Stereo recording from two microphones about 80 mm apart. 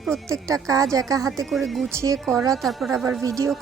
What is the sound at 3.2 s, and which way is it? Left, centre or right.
Speech, right.